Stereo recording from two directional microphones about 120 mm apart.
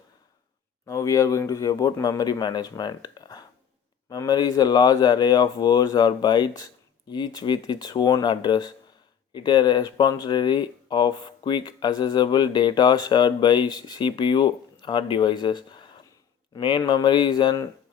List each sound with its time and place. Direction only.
0.9 s speech: 30° left (ahead or behind)